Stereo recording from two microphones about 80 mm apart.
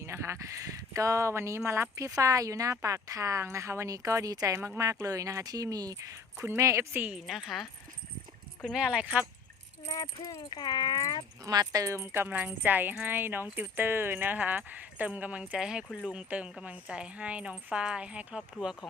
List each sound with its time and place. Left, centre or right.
0.0 s speech: right
6.9 s speech: right
7.2 s speech: centre
8.7 s speech: centre
9.8 s speech: left
11.4 s speech: right
11.9 s speech: right